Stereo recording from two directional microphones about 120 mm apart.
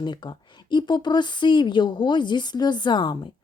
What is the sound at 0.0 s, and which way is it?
A woman's voice, 35° left (ahead or behind).